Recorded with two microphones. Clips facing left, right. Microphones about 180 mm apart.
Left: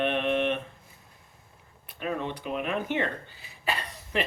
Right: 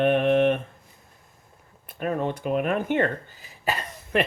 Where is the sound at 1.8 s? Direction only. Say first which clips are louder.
Right 5 dB; 45° right (ahead or behind).